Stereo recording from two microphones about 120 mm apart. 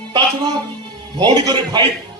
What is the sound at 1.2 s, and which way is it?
Speech, 35° right (ahead or behind).